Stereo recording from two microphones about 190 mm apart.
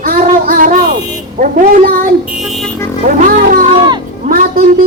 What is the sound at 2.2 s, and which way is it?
Speech, centre (ahead or behind).